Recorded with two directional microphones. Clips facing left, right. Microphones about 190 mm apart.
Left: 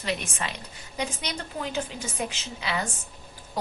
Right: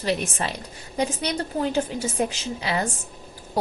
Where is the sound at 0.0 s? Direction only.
35° right (ahead or behind).